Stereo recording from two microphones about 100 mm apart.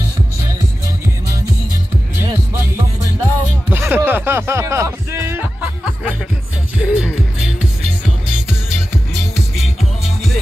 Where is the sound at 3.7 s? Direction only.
20° right (ahead or behind).